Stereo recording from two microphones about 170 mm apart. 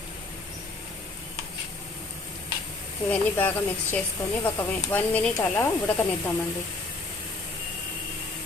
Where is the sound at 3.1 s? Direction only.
10° left (ahead or behind).